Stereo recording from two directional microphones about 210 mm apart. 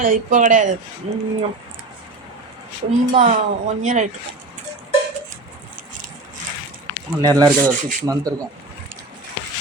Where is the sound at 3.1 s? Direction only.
35° right (ahead or behind).